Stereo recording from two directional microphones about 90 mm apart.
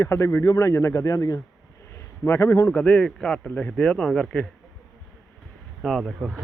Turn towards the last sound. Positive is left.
turn(degrees=-5)  # may be behind; listen again after turning